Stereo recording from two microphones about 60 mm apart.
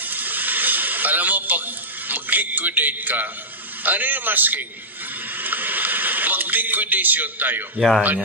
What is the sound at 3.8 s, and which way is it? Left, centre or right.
Speech, right.